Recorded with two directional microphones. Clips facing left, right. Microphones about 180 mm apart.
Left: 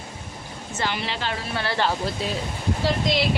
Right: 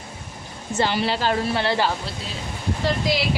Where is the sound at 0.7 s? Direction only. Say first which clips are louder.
Right 6 dB; 30° right (ahead or behind).